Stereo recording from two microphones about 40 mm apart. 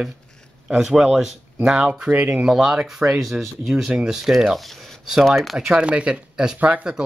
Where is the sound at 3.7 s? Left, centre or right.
Centre.